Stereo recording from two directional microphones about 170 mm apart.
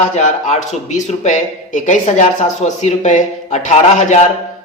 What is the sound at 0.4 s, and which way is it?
Speech, 45° left (ahead or behind).